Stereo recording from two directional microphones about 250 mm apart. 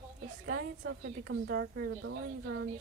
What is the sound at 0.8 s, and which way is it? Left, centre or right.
A woman's voice, right.